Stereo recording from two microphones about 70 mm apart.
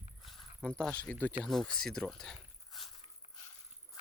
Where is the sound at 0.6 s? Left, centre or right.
Centre.